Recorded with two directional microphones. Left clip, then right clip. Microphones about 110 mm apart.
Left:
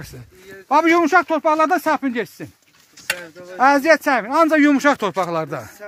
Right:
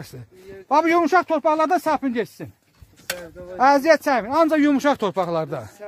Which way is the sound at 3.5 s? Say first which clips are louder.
Left 2 dB; 30° left (ahead or behind).